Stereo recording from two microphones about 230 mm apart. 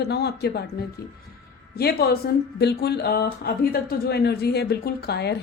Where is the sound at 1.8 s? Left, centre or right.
Left.